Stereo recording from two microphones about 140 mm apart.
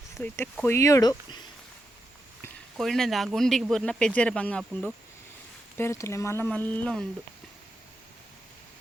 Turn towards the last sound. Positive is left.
turn(degrees=10)  # may be behind; listen again after turning